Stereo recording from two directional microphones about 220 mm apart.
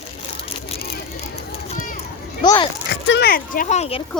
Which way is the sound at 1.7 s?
40° left (ahead or behind).